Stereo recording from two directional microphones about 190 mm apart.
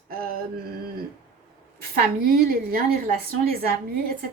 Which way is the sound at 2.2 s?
50° right (ahead or behind).